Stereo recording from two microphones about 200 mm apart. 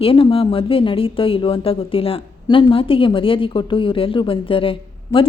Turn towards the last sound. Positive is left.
turn(degrees=25)  # may be behind; listen again after turning